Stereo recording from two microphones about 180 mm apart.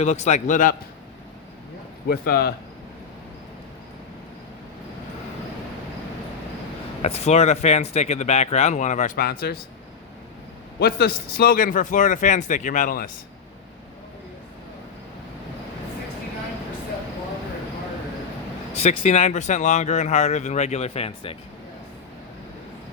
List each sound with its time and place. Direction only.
0.0 s speech: 40° left (ahead or behind)
2.0 s speech: 55° left (ahead or behind)
7.0 s speech: 35° left (ahead or behind); by 9.6 s 55° left (ahead or behind)
10.8 s a man's voice: 60° left (ahead or behind)
18.7 s speech: 40° left (ahead or behind)